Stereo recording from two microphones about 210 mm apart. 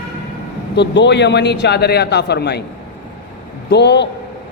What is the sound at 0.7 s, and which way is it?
A man's voice, 55° left (ahead or behind).